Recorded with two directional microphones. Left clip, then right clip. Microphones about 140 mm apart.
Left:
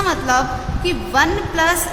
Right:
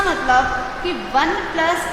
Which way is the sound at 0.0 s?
60° left (ahead or behind).